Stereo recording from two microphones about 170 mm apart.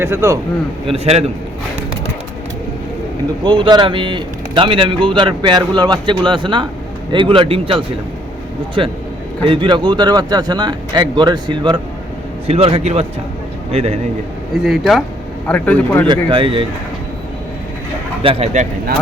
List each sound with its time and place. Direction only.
0.0 s a man's voice: 15° right (ahead or behind)
0.9 s speech: 35° right (ahead or behind)
3.4 s a man's voice: 25° right (ahead or behind)
12.5 s speech: 35° right (ahead or behind)
14.5 s speech: 5° right (ahead or behind)
16.0 s speech: 30° right (ahead or behind)
18.2 s speech: 35° right (ahead or behind)